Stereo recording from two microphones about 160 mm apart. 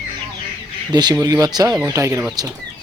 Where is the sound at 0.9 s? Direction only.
25° right (ahead or behind).